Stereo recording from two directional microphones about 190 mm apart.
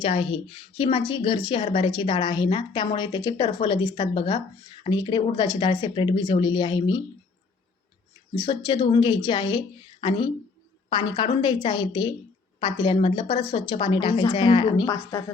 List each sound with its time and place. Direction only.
0.0 s a woman's voice: 30° left (ahead or behind)
8.4 s a woman's voice: 25° left (ahead or behind)